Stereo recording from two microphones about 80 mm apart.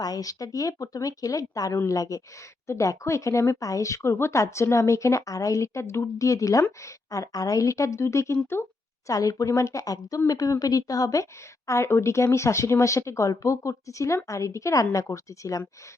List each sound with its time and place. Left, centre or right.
0.0 s speech: left